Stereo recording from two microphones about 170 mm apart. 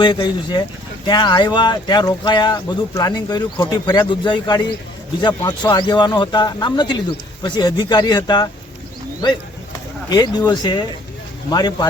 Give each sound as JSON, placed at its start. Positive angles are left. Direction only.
{"t": 0.0, "sound": "speech", "side_deg": 25}